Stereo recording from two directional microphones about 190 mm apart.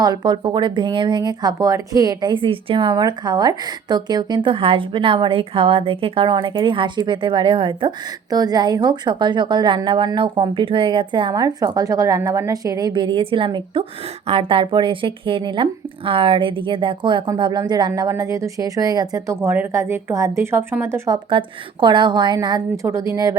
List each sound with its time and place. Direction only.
0.0 s a woman's voice: 20° right (ahead or behind)
21.2 s a woman's voice: 25° right (ahead or behind)